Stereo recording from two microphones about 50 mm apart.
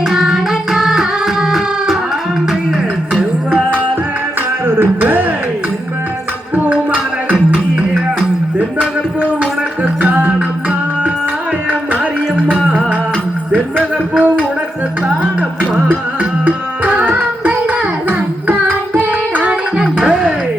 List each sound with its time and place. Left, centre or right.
0.1 s music: centre
4.6 s music: right
6.7 s music: right
9.8 s music: right
14.1 s a sound: right
16.5 s tabla: right
18.9 s music: right
19.7 s music: centre